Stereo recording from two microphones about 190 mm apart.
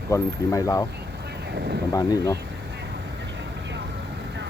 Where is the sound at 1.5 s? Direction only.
60° right (ahead or behind).